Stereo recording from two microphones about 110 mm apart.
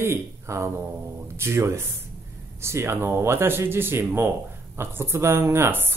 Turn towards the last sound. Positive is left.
turn(degrees=-20)  # may be behind; listen again after turning